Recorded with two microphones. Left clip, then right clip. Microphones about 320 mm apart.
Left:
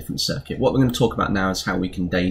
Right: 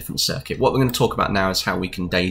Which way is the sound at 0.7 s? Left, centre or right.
Centre.